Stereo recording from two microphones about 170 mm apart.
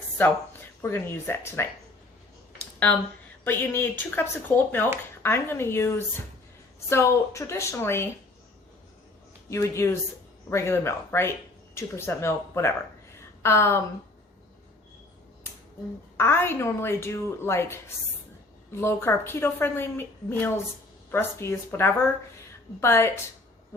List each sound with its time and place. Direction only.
0.8 s a woman's voice: 15° left (ahead or behind)
2.7 s a woman's voice: 10° left (ahead or behind)
9.5 s a woman's voice: 15° left (ahead or behind)
16.1 s a woman's voice: 15° left (ahead or behind)